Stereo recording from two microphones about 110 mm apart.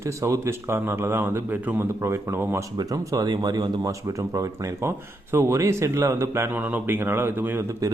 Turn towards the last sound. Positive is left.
turn(degrees=-20)  # may be behind; listen again after turning